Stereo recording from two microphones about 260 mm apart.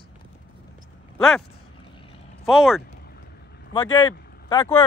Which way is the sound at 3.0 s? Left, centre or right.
Left.